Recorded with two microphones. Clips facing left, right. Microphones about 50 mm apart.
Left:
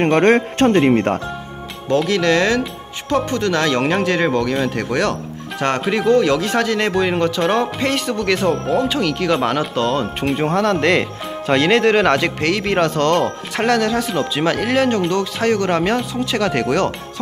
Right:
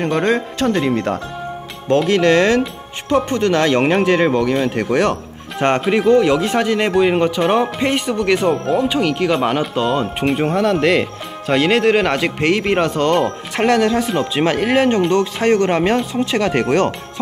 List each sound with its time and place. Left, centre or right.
0.0 s speech: left
0.7 s speech: left
2.0 s speech: right; by 12.3 s centre
12.4 s speech: centre
13.6 s speech: right